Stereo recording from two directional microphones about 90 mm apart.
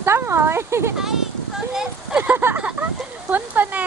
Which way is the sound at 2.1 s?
20° right (ahead or behind).